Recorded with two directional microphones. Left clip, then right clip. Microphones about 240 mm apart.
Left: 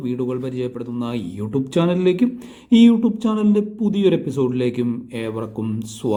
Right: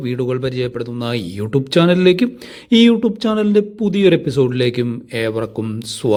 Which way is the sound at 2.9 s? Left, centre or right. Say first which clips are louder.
Right 3 dB; right.